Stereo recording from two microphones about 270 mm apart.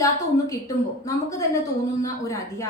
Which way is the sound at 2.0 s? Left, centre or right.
Centre.